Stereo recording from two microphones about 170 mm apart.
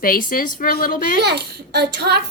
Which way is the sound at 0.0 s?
55° left (ahead or behind).